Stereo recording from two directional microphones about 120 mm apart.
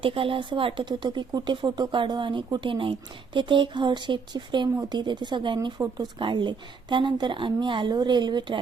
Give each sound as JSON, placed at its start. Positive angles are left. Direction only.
{"t": 0.0, "sound": "a woman's voice", "side_deg": -50}
{"t": 5.8, "sound": "speech", "side_deg": -20}
{"t": 6.1, "sound": "a woman's voice", "side_deg": -40}